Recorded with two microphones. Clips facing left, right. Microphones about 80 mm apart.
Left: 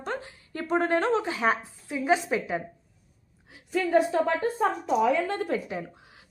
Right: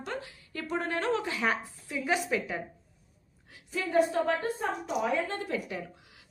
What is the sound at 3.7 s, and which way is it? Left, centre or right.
Speech, left.